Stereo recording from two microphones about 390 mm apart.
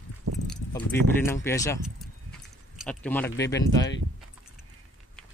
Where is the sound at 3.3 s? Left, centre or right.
Left.